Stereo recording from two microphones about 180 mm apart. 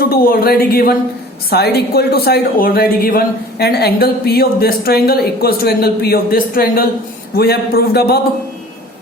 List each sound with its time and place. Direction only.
0.0 s a woman's voice: 55° left (ahead or behind)